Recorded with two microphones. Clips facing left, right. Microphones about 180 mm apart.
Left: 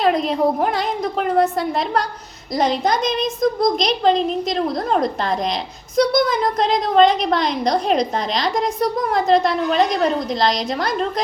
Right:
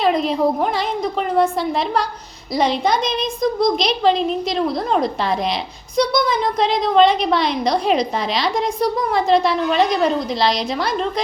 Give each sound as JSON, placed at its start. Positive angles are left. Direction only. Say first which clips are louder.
{"t": 0.0, "sound": "a woman's voice", "louder": "even", "side_deg": 0}
{"t": 3.2, "sound": "a woman's voice", "louder": "even", "side_deg": 45}
{"t": 3.8, "sound": "a woman's voice", "louder": "even", "side_deg": 0}